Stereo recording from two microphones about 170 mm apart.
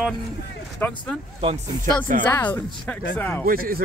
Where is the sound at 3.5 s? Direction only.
60° right (ahead or behind).